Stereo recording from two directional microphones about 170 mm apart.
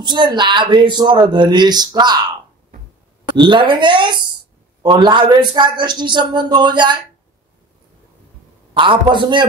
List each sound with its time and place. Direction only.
0.0 s speech: 25° right (ahead or behind)
3.3 s speech: 30° right (ahead or behind)
8.7 s speech: 30° right (ahead or behind)